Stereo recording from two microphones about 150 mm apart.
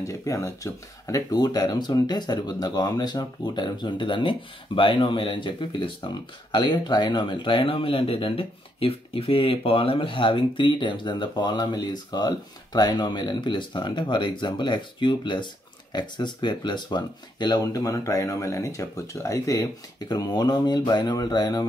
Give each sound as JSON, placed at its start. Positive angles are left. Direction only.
{"t": 0.0, "sound": "speech", "side_deg": 20}